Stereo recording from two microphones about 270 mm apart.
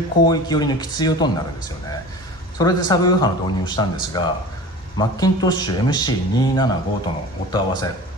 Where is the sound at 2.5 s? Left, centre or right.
Centre.